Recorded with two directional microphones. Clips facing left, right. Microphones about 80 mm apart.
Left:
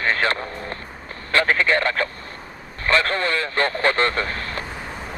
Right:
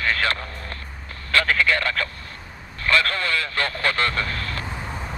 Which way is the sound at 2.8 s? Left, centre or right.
Left.